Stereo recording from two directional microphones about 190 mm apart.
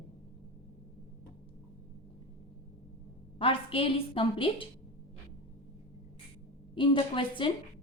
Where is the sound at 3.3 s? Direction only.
30° left (ahead or behind).